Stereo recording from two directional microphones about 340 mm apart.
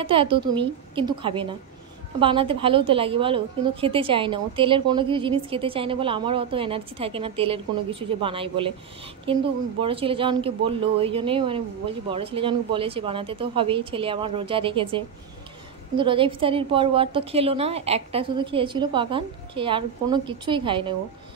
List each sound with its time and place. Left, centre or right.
0.0 s a woman's voice: centre